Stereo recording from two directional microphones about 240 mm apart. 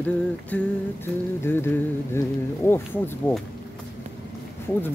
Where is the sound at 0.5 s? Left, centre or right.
Centre.